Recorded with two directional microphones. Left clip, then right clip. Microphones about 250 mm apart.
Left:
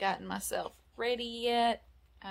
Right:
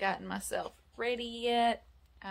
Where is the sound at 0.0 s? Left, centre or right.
Centre.